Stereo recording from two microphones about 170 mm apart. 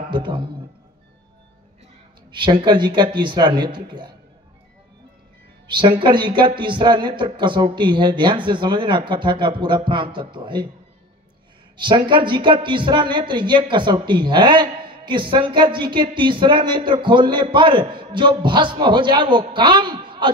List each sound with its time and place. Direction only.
0.1 s speech: 30° right (ahead or behind)
2.3 s speech: 30° right (ahead or behind)
5.7 s speech: 30° right (ahead or behind)
11.7 s speech: 30° right (ahead or behind)